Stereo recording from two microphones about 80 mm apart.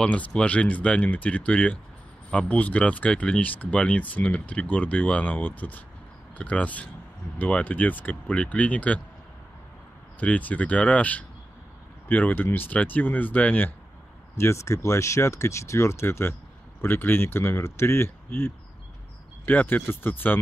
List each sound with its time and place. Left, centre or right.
0.0 s speech: centre
10.2 s speech: centre
14.3 s speech: left